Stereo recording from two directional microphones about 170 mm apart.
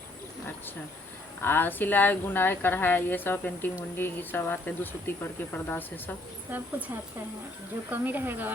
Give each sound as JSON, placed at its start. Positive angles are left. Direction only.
{"t": 1.4, "sound": "speech", "side_deg": 10}
{"t": 6.5, "sound": "speech", "side_deg": -10}